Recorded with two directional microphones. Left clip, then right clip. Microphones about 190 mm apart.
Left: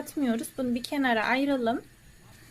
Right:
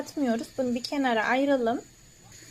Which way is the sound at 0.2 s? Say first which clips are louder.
Right 2 dB; 15° left (ahead or behind).